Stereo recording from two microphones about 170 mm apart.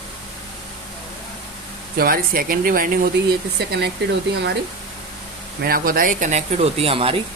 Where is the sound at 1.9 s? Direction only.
60° right (ahead or behind).